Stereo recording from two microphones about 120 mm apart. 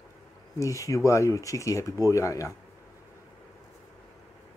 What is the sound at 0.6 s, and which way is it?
Speech, 25° left (ahead or behind).